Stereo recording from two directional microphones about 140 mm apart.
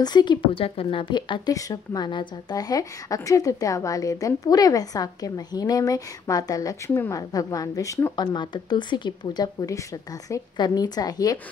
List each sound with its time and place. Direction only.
0.0 s speech: 30° left (ahead or behind)